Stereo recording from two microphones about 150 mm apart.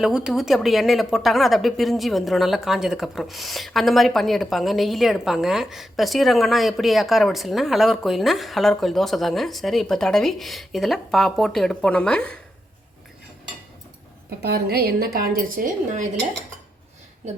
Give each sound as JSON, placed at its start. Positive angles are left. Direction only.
{"t": 0.0, "sound": "speech", "side_deg": -5}
{"t": 14.3, "sound": "a woman's voice", "side_deg": -90}
{"t": 17.2, "sound": "a woman's voice", "side_deg": -50}